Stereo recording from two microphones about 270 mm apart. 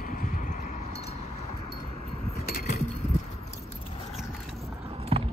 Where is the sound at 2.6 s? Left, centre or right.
Left.